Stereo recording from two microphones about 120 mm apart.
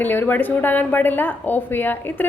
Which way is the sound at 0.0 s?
15° left (ahead or behind).